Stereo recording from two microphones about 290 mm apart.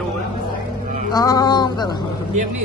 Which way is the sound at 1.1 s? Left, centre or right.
Centre.